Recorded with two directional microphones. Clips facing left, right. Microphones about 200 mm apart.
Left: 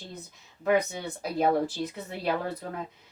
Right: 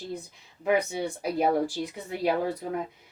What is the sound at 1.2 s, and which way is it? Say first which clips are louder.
Speech: even; 10° right (ahead or behind).